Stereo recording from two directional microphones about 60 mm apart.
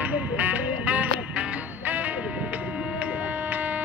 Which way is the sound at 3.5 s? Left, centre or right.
Right.